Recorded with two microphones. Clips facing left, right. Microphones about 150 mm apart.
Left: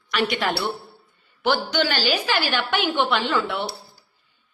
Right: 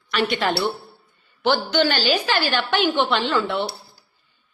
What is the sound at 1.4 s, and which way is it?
A woman's voice, 10° left (ahead or behind).